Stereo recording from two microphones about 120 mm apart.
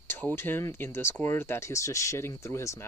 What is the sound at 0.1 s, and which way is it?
Speech, 20° left (ahead or behind).